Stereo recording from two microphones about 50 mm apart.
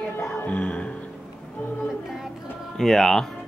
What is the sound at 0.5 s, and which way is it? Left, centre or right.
Music, left.